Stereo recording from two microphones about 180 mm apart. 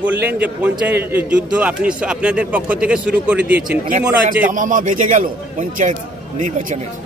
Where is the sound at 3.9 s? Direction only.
50° right (ahead or behind).